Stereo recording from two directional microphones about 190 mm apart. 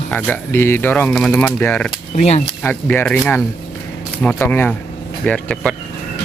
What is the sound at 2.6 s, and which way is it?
Speech, 10° left (ahead or behind).